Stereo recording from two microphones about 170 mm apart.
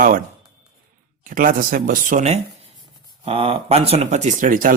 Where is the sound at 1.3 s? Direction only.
55° right (ahead or behind).